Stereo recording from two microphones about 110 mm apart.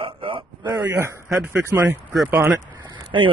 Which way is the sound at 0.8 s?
20° right (ahead or behind).